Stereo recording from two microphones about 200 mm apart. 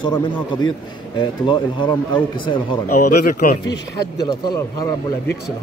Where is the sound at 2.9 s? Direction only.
50° left (ahead or behind).